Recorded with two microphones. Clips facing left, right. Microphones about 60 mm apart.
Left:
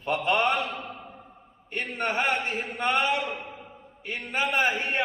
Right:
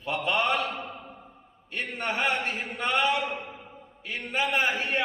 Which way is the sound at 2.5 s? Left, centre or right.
Centre.